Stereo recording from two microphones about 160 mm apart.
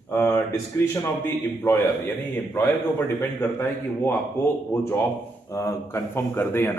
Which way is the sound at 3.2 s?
15° left (ahead or behind).